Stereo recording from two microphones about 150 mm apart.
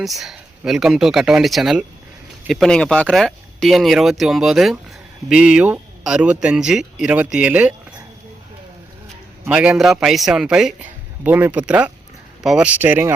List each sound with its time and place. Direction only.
0.0 s a man's voice: centre (ahead or behind)
9.5 s a man's voice: 5° right (ahead or behind)